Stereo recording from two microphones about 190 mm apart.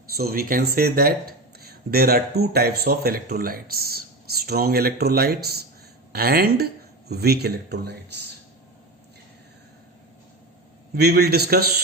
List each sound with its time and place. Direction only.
0.1 s speech: 55° right (ahead or behind)
10.9 s speech: 60° right (ahead or behind)